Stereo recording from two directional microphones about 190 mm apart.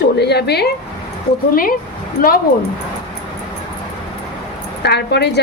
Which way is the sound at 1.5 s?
50° left (ahead or behind).